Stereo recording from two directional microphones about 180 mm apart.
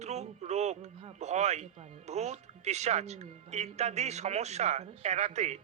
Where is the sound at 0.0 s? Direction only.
40° right (ahead or behind).